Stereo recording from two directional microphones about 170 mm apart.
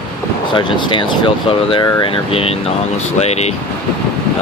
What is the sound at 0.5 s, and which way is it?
Speech, 30° left (ahead or behind).